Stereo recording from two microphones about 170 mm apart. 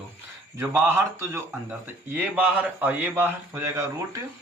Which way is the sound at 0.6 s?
15° right (ahead or behind).